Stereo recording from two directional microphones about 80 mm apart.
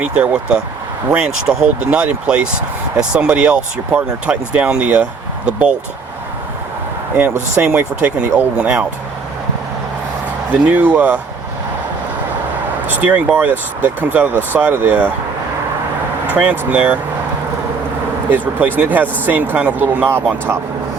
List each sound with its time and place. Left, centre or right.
0.0 s speech: centre
7.6 s speech: centre
10.5 s speech: right
12.9 s speech: right
16.3 s speech: right
18.3 s speech: right